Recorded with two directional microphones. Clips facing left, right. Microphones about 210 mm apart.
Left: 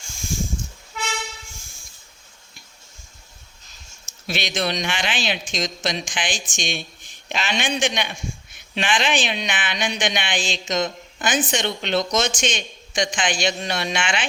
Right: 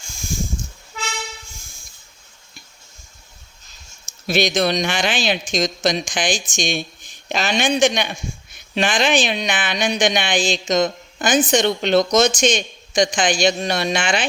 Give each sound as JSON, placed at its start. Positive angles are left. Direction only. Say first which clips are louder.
{"t": 4.0, "sound": "speech", "louder": "right 9 dB", "side_deg": -40}